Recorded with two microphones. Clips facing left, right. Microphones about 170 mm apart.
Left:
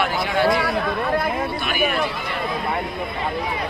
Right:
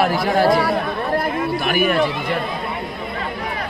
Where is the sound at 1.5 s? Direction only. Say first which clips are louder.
Right 5 dB; 45° right (ahead or behind).